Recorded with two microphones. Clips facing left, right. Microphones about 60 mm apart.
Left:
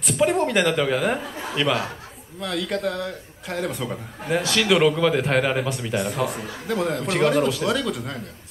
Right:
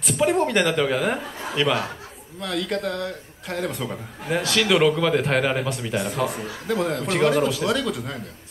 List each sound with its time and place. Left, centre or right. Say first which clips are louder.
0.0 s a man's voice: even; centre